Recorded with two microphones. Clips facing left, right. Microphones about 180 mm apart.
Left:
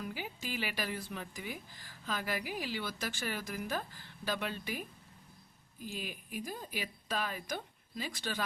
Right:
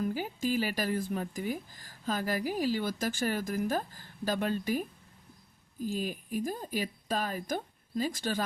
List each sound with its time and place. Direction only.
0.0 s a woman's voice: 45° right (ahead or behind)